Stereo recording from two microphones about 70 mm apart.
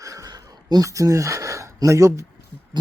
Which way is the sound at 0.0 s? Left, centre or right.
Right.